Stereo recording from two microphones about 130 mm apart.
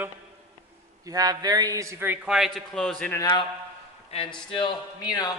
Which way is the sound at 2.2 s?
5° right (ahead or behind).